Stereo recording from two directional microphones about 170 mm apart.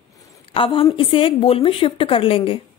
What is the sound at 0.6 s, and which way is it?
Speech, 30° left (ahead or behind).